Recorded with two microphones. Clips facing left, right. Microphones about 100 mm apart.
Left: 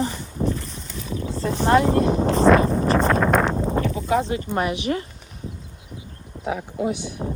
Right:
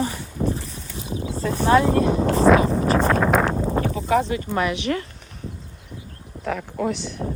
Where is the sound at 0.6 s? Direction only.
5° right (ahead or behind).